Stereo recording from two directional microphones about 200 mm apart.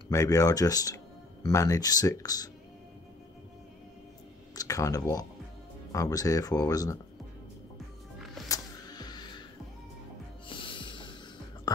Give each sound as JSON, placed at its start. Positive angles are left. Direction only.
{"t": 0.1, "sound": "speech", "side_deg": 15}
{"t": 4.6, "sound": "speech", "side_deg": 15}
{"t": 8.5, "sound": "music", "side_deg": 20}
{"t": 10.5, "sound": "music", "side_deg": 25}